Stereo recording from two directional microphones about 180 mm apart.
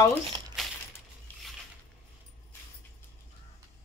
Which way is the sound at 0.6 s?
Centre (ahead or behind).